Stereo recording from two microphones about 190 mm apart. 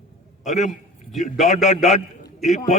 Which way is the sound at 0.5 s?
40° left (ahead or behind).